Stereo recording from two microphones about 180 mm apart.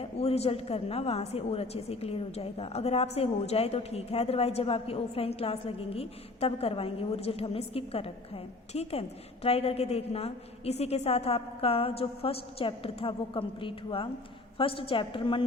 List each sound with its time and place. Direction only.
0.0 s a woman's voice: 35° left (ahead or behind)